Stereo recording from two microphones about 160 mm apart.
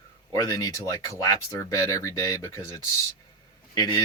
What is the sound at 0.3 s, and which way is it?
Speech, 20° left (ahead or behind).